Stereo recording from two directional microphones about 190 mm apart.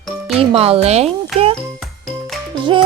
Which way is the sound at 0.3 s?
30° right (ahead or behind).